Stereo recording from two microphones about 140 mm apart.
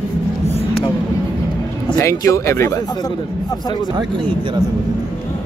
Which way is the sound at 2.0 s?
20° left (ahead or behind).